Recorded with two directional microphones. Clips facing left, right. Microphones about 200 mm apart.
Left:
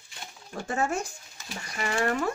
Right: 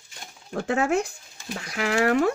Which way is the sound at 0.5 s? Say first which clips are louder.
Right 6 dB; 65° right (ahead or behind).